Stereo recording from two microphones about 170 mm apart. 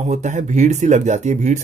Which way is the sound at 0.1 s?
45° right (ahead or behind).